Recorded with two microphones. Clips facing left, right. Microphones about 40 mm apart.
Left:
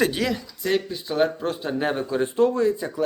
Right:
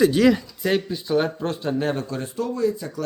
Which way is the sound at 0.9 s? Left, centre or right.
Centre.